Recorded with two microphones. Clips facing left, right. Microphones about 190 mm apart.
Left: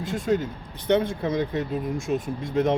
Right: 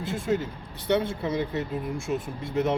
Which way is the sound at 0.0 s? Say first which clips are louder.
Left 3 dB; 15° left (ahead or behind).